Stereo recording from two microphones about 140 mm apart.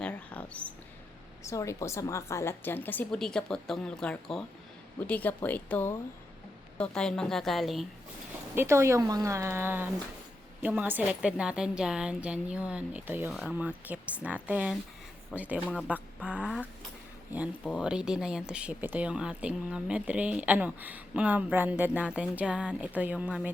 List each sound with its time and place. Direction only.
0.0 s a sound: 10° left (ahead or behind)
1.5 s a woman's voice: 20° left (ahead or behind); by 7.9 s centre (ahead or behind)
8.5 s speech: 20° right (ahead or behind)
17.7 s speech: 5° right (ahead or behind)